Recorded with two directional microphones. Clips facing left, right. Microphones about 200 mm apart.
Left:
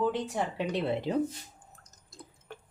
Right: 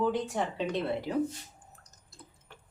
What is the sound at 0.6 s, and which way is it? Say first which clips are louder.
Speech: left 3 dB; 15° left (ahead or behind).